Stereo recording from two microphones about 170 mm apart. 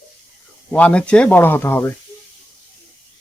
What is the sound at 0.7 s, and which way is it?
Speech, 10° left (ahead or behind).